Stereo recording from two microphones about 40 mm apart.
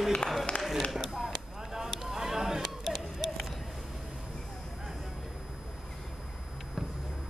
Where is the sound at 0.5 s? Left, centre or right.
Left.